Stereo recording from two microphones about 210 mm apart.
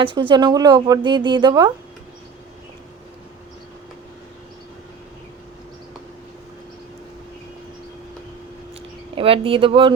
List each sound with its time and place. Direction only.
0.0 s speech: 25° right (ahead or behind)
9.1 s speech: 25° right (ahead or behind)